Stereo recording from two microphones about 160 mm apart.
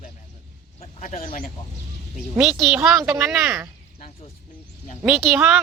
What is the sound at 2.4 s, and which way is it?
Speech, centre (ahead or behind).